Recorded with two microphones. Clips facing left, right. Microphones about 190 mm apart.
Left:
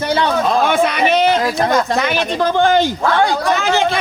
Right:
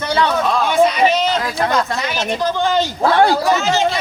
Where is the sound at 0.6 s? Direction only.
60° left (ahead or behind).